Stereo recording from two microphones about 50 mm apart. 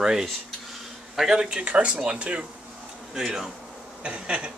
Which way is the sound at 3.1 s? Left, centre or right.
Centre.